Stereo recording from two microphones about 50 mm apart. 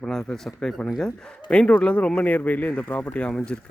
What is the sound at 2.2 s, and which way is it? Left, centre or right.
Speech, left.